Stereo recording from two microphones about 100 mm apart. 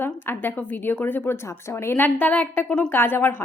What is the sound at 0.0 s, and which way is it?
A woman's voice, 20° left (ahead or behind).